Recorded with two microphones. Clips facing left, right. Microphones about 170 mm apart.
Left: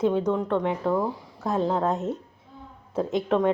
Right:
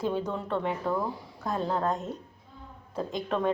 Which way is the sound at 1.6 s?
5° left (ahead or behind).